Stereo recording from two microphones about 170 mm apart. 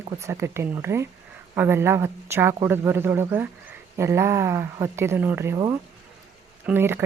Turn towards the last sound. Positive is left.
turn(degrees=-10)  # may be behind; listen again after turning